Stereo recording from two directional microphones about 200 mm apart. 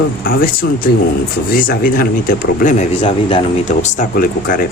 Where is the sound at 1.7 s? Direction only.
45° left (ahead or behind).